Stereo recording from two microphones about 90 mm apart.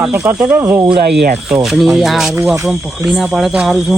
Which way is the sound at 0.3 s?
20° right (ahead or behind).